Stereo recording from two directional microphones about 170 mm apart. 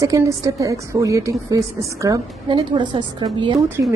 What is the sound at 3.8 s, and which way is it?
Speech, 15° right (ahead or behind).